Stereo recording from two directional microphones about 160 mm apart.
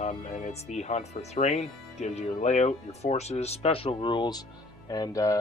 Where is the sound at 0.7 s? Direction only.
45° left (ahead or behind).